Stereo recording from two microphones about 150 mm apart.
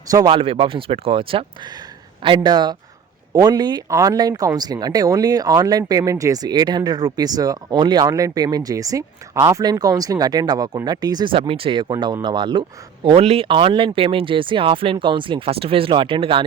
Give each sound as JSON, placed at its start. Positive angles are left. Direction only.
{"t": 0.3, "sound": "speech", "side_deg": -35}